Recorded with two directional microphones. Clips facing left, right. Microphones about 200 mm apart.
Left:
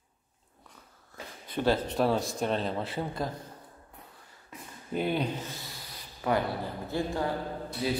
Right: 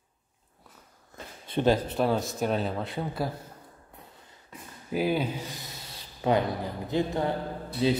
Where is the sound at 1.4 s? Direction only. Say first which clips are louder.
Right 4 dB; 25° right (ahead or behind).